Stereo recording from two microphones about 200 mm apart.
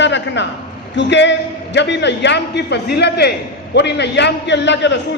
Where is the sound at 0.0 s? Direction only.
60° left (ahead or behind).